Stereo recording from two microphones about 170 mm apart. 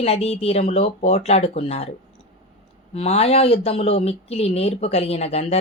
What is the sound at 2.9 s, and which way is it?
Speech, 35° left (ahead or behind).